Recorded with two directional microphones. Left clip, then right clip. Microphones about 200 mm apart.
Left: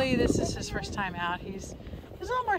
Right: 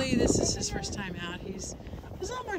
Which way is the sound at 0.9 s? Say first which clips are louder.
Left 6 dB; 5° left (ahead or behind).